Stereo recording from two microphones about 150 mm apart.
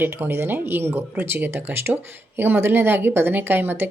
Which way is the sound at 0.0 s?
15° right (ahead or behind).